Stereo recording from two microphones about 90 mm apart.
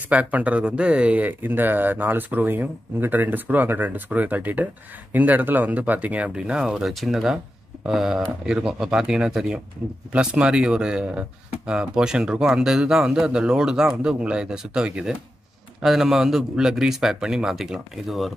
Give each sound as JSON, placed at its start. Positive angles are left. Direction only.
{"t": 0.1, "sound": "speech", "side_deg": -15}
{"t": 6.7, "sound": "a man's voice", "side_deg": 0}